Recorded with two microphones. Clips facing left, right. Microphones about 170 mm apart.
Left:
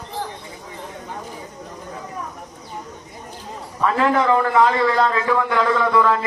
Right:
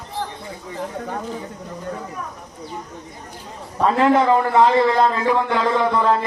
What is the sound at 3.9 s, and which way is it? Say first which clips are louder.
A man's voice: right 2 dB; 25° right (ahead or behind).